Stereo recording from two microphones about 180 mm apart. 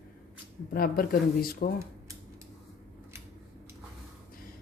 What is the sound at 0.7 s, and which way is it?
Speech, 55° left (ahead or behind).